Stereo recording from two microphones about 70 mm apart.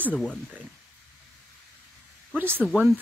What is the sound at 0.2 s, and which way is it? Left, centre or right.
Speech, centre.